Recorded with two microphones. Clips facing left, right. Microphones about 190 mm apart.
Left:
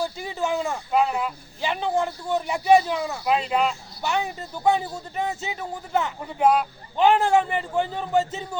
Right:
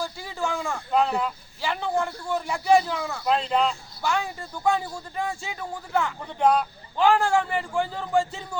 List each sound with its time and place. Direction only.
0.0 s speech: 20° left (ahead or behind)
0.9 s speech: 5° left (ahead or behind)
1.6 s speech: 20° left (ahead or behind)
3.2 s speech: 5° left (ahead or behind)
4.0 s speech: 20° left (ahead or behind)
6.2 s speech: 5° left (ahead or behind)
6.9 s speech: 20° left (ahead or behind)